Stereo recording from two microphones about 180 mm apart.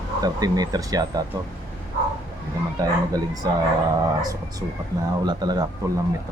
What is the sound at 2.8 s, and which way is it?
Speech, 20° right (ahead or behind).